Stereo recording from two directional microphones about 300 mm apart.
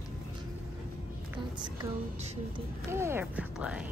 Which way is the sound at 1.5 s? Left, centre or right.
Centre.